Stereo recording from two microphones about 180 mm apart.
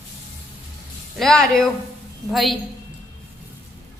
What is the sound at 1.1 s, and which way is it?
A woman's voice, centre (ahead or behind).